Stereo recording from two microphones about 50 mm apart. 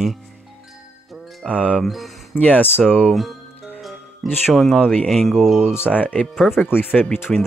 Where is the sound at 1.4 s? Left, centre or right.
Centre.